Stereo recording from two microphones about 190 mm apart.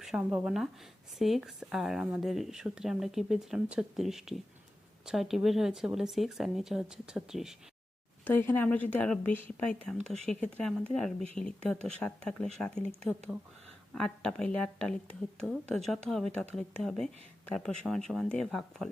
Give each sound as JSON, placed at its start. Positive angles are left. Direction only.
{"t": 0.0, "sound": "speech", "side_deg": -5}
{"t": 8.2, "sound": "a woman's voice", "side_deg": 10}
{"t": 13.9, "sound": "speech", "side_deg": 5}